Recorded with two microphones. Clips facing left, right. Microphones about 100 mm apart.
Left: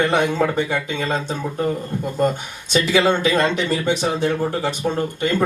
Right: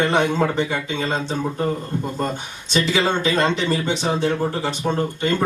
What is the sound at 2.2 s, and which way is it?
Speech, 50° left (ahead or behind).